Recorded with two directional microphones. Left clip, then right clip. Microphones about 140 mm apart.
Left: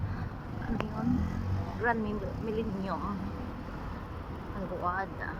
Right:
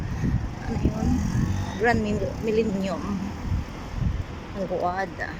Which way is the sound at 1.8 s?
20° right (ahead or behind).